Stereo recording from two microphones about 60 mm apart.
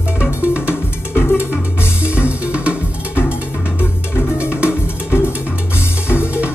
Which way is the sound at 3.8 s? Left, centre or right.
Left.